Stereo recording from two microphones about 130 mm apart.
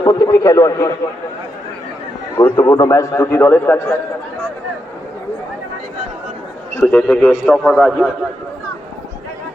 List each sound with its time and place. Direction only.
0.0 s a man's voice: 25° left (ahead or behind)
2.4 s a man's voice: 10° left (ahead or behind)
2.6 s a man's voice: 25° left (ahead or behind)
6.7 s a man's voice: 15° left (ahead or behind)